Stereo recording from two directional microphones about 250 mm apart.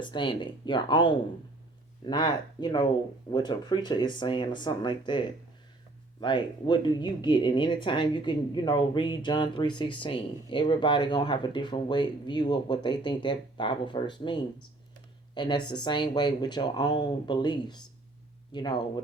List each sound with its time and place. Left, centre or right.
0.0 s speech: centre